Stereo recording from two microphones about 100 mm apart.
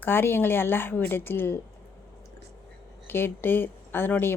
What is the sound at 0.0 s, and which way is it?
Speech, 20° left (ahead or behind).